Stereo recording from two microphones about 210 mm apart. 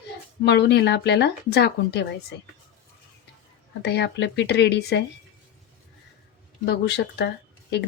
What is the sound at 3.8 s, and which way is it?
A woman's voice, 55° left (ahead or behind).